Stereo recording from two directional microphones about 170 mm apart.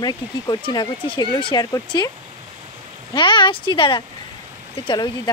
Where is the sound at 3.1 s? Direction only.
30° left (ahead or behind).